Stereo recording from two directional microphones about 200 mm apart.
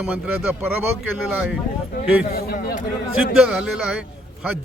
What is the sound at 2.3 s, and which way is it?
Speech, 50° left (ahead or behind).